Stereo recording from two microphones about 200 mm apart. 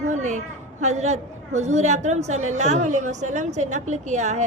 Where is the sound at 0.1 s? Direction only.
35° right (ahead or behind).